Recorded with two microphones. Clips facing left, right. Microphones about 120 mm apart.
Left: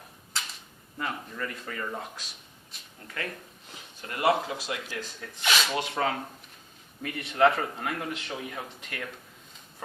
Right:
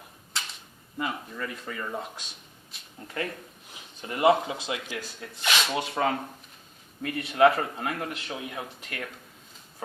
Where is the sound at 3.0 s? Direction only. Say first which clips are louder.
Right 4 dB; 25° right (ahead or behind).